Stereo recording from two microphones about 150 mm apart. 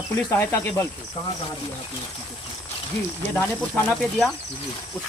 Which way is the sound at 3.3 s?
15° left (ahead or behind).